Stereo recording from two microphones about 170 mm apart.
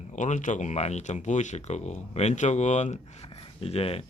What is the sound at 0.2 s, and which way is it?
Speech, 45° left (ahead or behind).